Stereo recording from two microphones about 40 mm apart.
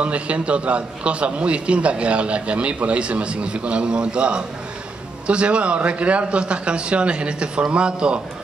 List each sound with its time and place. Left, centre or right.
0.0 s a man's voice: right